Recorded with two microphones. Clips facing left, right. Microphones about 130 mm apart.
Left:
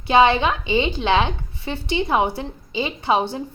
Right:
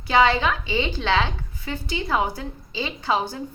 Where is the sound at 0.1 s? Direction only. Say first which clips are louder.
Left 3 dB; 20° left (ahead or behind).